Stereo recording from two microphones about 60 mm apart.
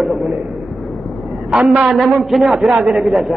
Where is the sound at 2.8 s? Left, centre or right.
Right.